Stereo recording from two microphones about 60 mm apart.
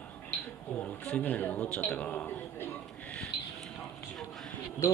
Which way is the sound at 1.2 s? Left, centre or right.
Left.